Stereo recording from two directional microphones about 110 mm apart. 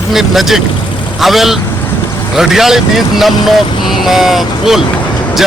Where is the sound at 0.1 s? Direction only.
Centre (ahead or behind).